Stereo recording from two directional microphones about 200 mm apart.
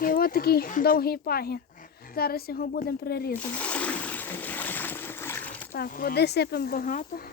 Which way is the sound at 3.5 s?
5° left (ahead or behind).